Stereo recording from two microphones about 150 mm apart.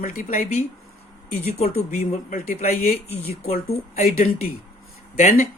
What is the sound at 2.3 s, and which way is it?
Speech, 45° left (ahead or behind).